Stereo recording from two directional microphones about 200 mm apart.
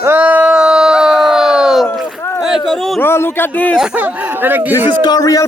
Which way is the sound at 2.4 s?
Centre (ahead or behind).